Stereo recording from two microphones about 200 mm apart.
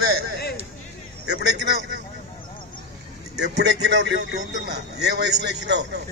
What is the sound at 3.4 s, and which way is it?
A man's voice, 55° right (ahead or behind).